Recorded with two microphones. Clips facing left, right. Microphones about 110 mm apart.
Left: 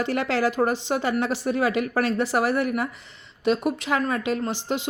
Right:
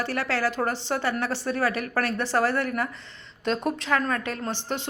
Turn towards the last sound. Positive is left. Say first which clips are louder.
# left 4 dB
turn(degrees=15)  # may be behind; listen again after turning